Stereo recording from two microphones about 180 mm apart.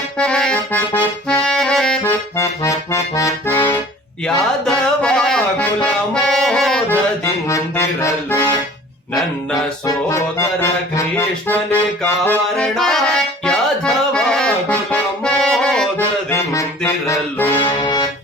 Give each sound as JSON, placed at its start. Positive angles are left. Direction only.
{"t": 0.2, "sound": "accordion", "side_deg": 5}
{"t": 4.3, "sound": "music", "side_deg": 5}
{"t": 9.8, "sound": "music", "side_deg": 15}
{"t": 17.6, "sound": "accordion", "side_deg": 25}